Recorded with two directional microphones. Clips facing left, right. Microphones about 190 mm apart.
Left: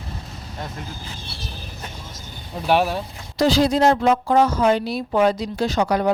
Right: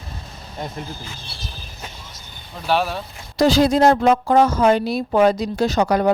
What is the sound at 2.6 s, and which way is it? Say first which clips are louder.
Speech: left 2 dB; 15° left (ahead or behind).